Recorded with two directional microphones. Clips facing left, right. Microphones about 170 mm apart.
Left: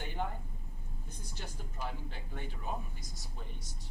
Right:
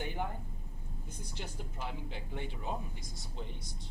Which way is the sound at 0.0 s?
15° right (ahead or behind).